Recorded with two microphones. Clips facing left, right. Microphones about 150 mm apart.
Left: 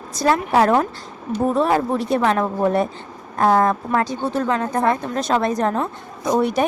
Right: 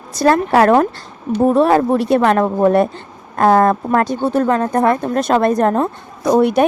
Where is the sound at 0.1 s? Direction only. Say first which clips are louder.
Right 5 dB; 65° right (ahead or behind).